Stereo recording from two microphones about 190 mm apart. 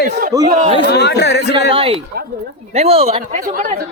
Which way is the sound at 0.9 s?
60° left (ahead or behind).